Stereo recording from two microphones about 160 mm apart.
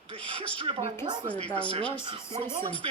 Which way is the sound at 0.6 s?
35° right (ahead or behind).